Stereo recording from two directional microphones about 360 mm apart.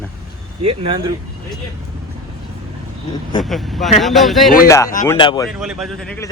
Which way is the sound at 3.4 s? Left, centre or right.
Centre.